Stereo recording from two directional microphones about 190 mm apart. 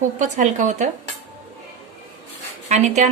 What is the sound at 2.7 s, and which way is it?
Speech, 35° right (ahead or behind).